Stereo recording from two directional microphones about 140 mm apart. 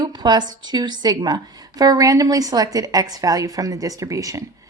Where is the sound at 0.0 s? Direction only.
30° right (ahead or behind).